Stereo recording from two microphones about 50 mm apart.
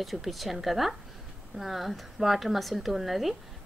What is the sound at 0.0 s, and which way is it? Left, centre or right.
Speech, centre.